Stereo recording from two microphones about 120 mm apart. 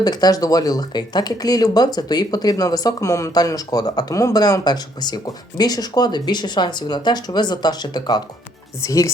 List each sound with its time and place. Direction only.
0.0 s speech: 35° left (ahead or behind)
8.8 s speech: 25° left (ahead or behind)